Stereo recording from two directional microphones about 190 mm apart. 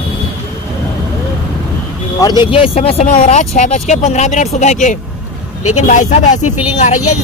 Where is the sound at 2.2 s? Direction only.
20° left (ahead or behind).